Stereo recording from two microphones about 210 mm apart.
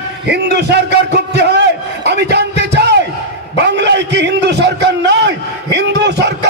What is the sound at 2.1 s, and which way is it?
Music, 50° right (ahead or behind).